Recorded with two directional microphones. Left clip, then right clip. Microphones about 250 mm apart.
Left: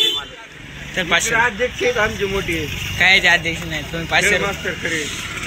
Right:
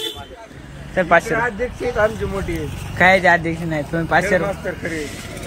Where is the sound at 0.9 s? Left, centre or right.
Centre.